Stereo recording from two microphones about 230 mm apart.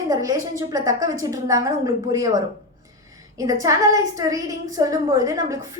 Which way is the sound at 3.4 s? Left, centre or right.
Centre.